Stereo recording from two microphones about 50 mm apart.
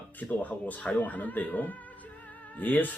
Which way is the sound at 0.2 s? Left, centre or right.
Left.